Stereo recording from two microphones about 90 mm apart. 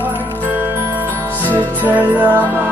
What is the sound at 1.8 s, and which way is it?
Music, 20° right (ahead or behind).